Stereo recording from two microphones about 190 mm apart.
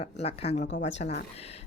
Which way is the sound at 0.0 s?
30° left (ahead or behind).